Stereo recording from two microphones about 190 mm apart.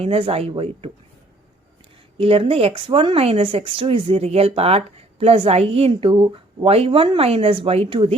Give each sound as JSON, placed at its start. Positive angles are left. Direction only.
{"t": 0.0, "sound": "speech", "side_deg": -30}
{"t": 2.1, "sound": "speech", "side_deg": -30}